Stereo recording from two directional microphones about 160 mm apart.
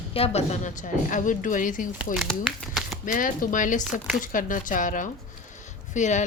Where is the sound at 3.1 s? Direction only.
60° left (ahead or behind).